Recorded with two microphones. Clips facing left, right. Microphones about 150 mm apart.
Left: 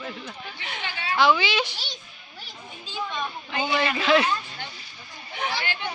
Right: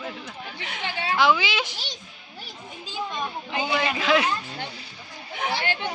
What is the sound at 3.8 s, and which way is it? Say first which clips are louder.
Speech: left 2 dB; 10° right (ahead or behind).